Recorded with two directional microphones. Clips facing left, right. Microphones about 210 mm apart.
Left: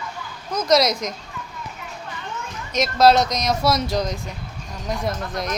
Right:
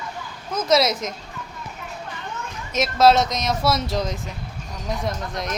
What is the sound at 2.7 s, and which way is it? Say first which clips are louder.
A woman's voice: left 1 dB; 5° right (ahead or behind).